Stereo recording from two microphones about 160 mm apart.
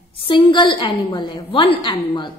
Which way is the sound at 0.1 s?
35° left (ahead or behind).